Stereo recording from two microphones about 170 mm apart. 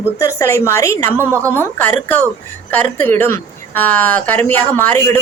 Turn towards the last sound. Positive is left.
turn(degrees=10)  # may be behind; listen again after turning